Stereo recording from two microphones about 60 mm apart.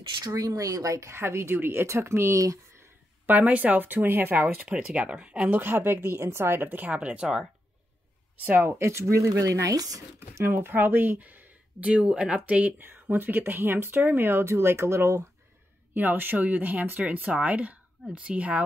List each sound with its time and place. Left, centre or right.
0.2 s speech: right
1.0 s speech: right
3.3 s speech: right
4.6 s speech: centre
5.6 s speech: right
8.5 s speech: right
10.4 s speech: right
11.8 s speech: centre
12.7 s speech: right
15.9 s speech: right